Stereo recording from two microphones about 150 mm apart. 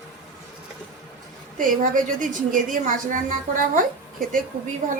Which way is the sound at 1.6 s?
65° right (ahead or behind).